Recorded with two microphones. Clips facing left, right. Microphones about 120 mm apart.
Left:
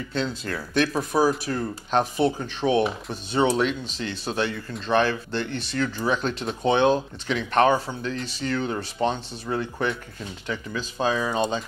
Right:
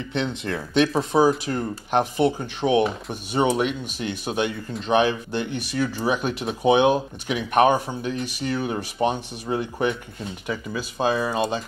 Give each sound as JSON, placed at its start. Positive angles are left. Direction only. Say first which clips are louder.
{"t": 0.1, "sound": "speech", "louder": "right 2 dB", "side_deg": -20}